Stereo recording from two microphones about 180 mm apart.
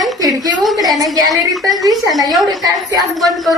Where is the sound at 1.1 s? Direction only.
20° right (ahead or behind).